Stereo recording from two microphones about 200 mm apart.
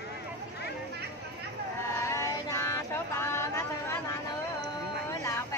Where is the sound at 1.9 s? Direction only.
15° left (ahead or behind).